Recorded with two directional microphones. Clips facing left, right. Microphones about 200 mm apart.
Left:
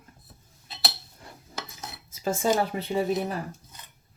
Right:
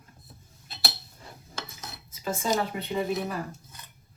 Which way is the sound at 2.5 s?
30° left (ahead or behind).